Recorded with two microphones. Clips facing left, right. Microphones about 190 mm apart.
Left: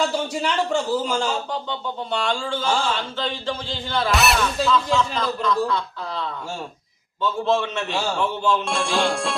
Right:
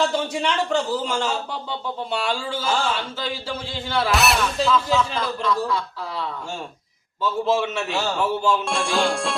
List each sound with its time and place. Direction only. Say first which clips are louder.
0.0 s a man's voice: right 1 dB; centre (ahead or behind)
7.2 s a man's voice: even; 5° right (ahead or behind)